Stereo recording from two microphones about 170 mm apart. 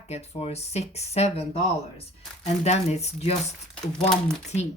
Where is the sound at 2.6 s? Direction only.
40° left (ahead or behind).